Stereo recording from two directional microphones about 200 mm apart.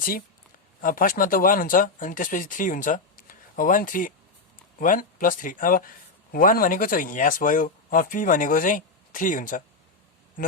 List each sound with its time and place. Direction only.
0.8 s speech: 45° left (ahead or behind)